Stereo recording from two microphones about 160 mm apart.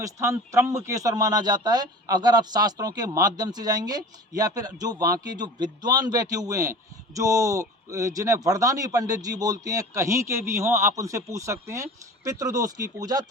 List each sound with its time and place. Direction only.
0.0 s a man's voice: 20° right (ahead or behind)